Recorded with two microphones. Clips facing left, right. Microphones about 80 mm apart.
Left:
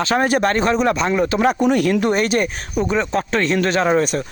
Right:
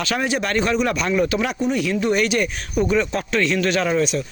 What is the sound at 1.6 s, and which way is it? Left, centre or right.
Speech, left.